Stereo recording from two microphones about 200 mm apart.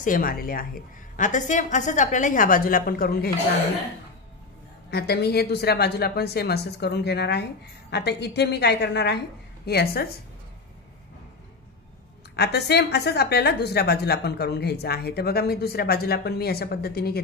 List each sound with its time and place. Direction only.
0.0 s a woman's voice: 45° left (ahead or behind)
4.9 s a woman's voice: 55° left (ahead or behind)
12.4 s a woman's voice: 55° left (ahead or behind)